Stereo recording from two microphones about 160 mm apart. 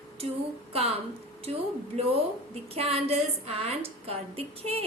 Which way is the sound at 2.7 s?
40° right (ahead or behind).